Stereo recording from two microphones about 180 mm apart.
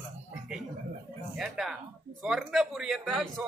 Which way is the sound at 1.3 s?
Centre (ahead or behind).